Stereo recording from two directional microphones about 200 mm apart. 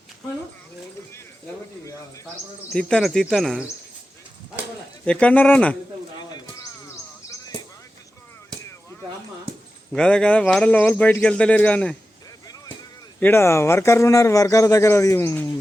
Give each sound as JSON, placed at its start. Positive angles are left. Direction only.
{"t": 2.7, "sound": "a man's voice", "side_deg": 0}
{"t": 5.0, "sound": "speech", "side_deg": 5}
{"t": 6.1, "sound": "a sound", "side_deg": 20}
{"t": 9.9, "sound": "a man's voice", "side_deg": 5}
{"t": 13.1, "sound": "speech", "side_deg": 10}